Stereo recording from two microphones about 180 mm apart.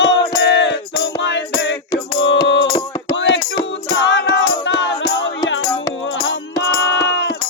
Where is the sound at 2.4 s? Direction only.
90° left.